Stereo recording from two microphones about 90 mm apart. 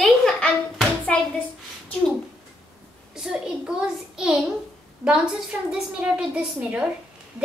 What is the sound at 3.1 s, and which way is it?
A child's voice, 10° right (ahead or behind).